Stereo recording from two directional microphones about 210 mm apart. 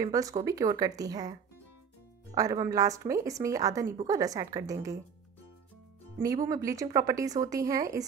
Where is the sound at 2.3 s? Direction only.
15° right (ahead or behind).